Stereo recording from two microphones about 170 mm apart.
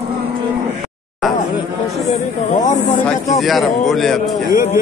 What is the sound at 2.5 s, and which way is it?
Speech, 45° left (ahead or behind).